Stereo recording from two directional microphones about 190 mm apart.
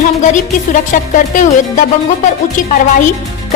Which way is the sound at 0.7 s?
45° left (ahead or behind).